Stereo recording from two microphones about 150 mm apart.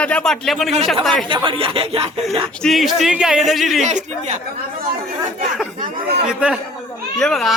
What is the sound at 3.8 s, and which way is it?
Speech, 50° right (ahead or behind).